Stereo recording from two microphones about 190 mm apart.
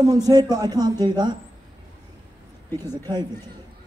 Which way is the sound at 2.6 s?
10° left (ahead or behind).